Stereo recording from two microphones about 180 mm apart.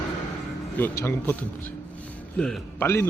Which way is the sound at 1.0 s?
10° left (ahead or behind).